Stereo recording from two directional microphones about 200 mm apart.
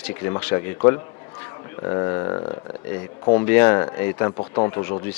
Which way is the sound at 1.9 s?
20° left (ahead or behind).